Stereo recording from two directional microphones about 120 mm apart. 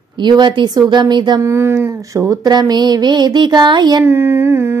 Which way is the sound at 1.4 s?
20° right (ahead or behind).